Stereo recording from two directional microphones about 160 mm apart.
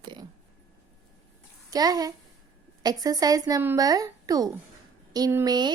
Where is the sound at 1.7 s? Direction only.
25° right (ahead or behind).